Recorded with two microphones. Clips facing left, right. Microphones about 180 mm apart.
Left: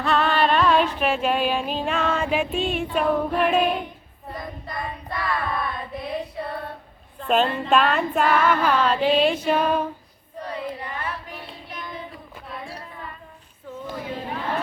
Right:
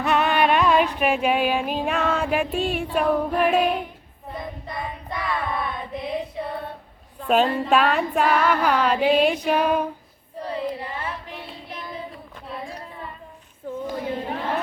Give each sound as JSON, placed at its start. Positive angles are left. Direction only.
{"t": 0.0, "sound": "female singing", "side_deg": -20}
{"t": 4.3, "sound": "child singing", "side_deg": -20}
{"t": 7.2, "sound": "a woman's voice", "side_deg": -5}
{"t": 7.6, "sound": "female singing", "side_deg": -5}
{"t": 8.6, "sound": "a sound", "side_deg": -15}
{"t": 10.4, "sound": "child singing", "side_deg": -30}
{"t": 13.7, "sound": "a sound", "side_deg": -50}